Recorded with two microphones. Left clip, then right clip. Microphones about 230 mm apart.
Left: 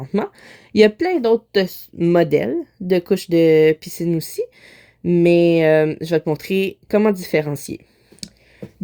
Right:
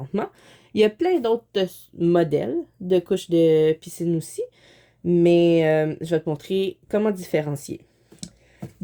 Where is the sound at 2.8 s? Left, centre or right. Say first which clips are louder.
Left 3 dB; left.